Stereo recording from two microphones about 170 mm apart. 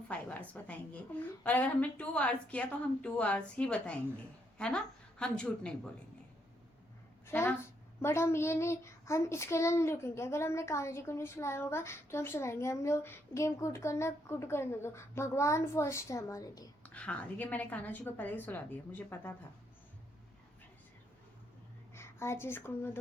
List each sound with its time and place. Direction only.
0.1 s a woman's voice: 10° left (ahead or behind)
7.3 s a woman's voice: 15° left (ahead or behind)
16.8 s a woman's voice: 5° left (ahead or behind)
21.9 s speech: 15° left (ahead or behind)